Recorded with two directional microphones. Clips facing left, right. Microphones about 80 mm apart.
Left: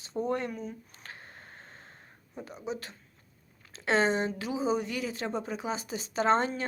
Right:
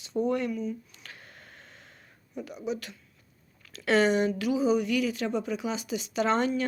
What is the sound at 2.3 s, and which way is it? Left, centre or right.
Speech, left.